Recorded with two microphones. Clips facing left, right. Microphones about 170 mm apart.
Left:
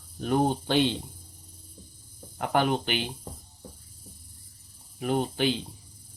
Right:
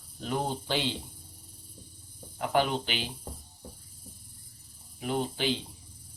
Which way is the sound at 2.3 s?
55° left (ahead or behind).